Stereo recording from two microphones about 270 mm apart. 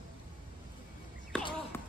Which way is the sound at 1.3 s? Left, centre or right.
Centre.